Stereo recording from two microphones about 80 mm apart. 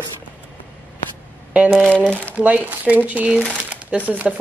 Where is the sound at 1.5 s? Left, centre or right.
Centre.